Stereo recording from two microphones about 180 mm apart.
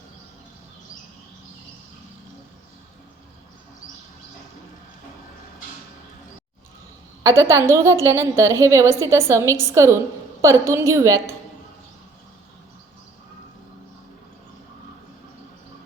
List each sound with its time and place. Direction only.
7.2 s a woman's voice: 15° right (ahead or behind)